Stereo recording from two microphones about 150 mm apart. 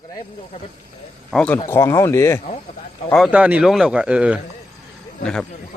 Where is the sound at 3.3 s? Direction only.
10° right (ahead or behind).